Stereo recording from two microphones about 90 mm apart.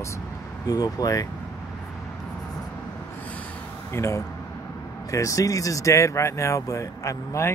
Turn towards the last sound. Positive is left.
turn(degrees=35)  # may be behind; listen again after turning